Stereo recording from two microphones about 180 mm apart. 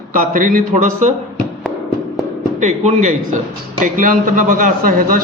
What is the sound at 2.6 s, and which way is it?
A man's voice, 40° right (ahead or behind).